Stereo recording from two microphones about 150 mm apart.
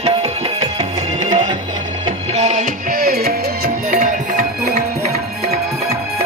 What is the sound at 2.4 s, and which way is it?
Music, 50° right (ahead or behind).